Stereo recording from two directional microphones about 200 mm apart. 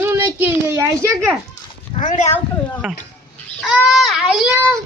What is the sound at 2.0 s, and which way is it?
Speech, 35° left (ahead or behind).